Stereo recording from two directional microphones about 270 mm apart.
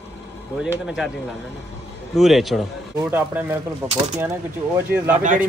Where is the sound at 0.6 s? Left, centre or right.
Centre.